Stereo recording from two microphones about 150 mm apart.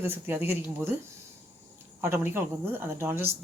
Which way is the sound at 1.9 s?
15° right (ahead or behind).